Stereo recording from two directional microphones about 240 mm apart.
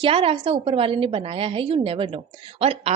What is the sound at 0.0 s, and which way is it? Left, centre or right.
A woman's voice, right.